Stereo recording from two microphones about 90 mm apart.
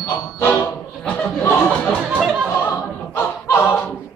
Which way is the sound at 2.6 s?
25° left (ahead or behind).